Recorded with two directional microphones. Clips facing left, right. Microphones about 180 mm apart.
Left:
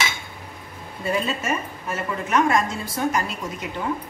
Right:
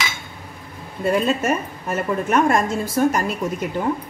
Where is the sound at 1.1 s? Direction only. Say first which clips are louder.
Right 5 dB; 55° right (ahead or behind).